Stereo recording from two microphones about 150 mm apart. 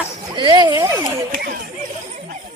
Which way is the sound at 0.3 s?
30° right (ahead or behind).